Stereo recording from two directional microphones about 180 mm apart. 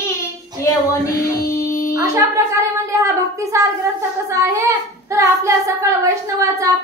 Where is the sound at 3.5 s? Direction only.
15° right (ahead or behind).